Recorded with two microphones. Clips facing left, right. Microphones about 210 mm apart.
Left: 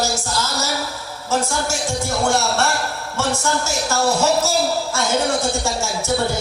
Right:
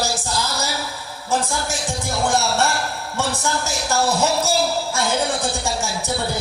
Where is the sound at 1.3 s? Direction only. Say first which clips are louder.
Left 2 dB; 15° right (ahead or behind).